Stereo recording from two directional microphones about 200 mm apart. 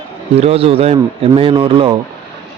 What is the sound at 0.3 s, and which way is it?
Speech, 30° right (ahead or behind).